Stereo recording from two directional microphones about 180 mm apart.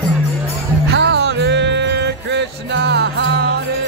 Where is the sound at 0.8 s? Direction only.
75° right (ahead or behind).